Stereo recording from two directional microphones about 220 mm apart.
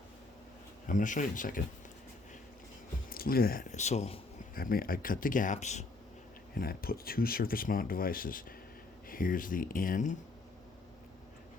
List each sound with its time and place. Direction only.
0.9 s speech: 35° left (ahead or behind)
3.1 s speech: 40° left (ahead or behind)
4.5 s speech: 40° left (ahead or behind)
6.5 s speech: 40° left (ahead or behind)